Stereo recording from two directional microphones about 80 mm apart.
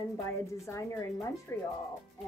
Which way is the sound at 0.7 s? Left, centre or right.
Left.